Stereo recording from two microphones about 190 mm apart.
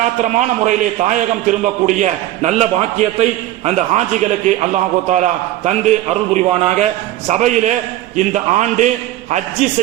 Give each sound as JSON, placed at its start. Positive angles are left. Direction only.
{"t": 0.0, "sound": "a man's voice", "side_deg": -40}